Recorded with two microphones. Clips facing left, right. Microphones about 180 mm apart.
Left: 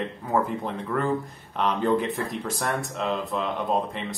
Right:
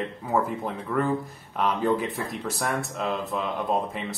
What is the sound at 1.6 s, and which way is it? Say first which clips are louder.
Speech: left 1 dB; 5° right (ahead or behind).